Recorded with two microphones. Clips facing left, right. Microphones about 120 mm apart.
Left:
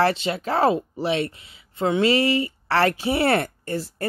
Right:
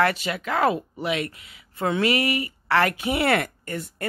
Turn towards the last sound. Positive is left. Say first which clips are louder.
# left 4 dB
turn(degrees=30)  # may be behind; listen again after turning